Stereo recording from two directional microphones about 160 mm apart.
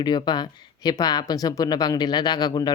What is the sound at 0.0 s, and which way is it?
Speech, 25° left (ahead or behind).